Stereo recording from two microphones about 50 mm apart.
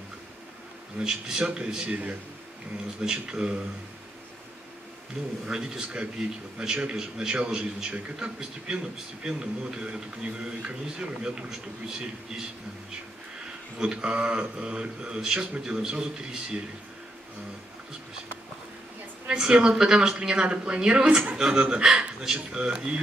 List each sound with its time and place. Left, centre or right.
0.9 s a man's voice: centre
3.0 s a man's voice: centre
5.5 s a man's voice: centre
13.7 s a man's voice: centre
19.2 s a man's voice: centre